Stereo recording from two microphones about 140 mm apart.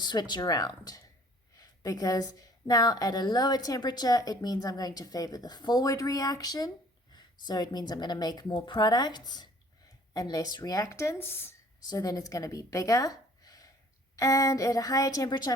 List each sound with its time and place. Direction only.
0.0 s a woman's voice: 30° left (ahead or behind)
11.9 s a woman's voice: 25° left (ahead or behind)